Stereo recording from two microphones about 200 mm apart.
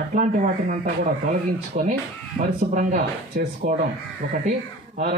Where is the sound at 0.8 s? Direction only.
40° right (ahead or behind).